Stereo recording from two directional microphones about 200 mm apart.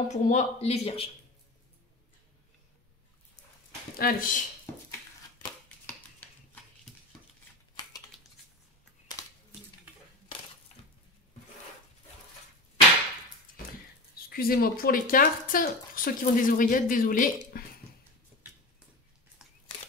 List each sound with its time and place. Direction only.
0.1 s speech: 35° left (ahead or behind)
4.0 s speech: 40° left (ahead or behind)
14.3 s speech: 50° left (ahead or behind)